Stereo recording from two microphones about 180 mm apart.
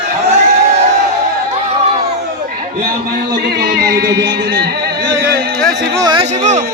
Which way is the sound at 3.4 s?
70° right (ahead or behind).